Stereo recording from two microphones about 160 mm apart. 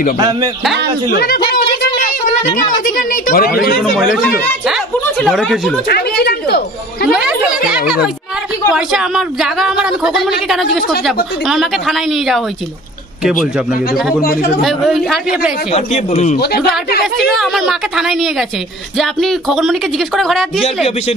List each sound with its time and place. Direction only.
1.1 s a woman's voice: 75° left (ahead or behind)
1.5 s a sound: 65° left (ahead or behind)
4.1 s speech: centre (ahead or behind)
6.2 s speech: 80° left
7.1 s speech: 5° right (ahead or behind)
14.6 s speech: centre (ahead or behind)
15.7 s speech: 45° left (ahead or behind)
16.3 s speech: 80° left
17.2 s speech: centre (ahead or behind)